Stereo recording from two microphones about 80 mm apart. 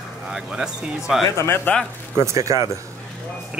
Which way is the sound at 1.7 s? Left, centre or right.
Left.